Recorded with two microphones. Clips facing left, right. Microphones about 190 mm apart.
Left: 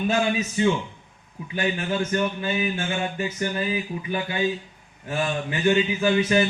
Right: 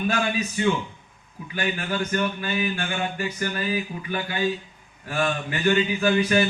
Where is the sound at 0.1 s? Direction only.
25° left (ahead or behind).